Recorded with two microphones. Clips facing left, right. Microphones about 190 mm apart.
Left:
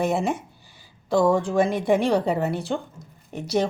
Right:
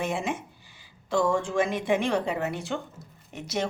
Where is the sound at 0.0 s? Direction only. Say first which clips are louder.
Left 6 dB; 40° left (ahead or behind).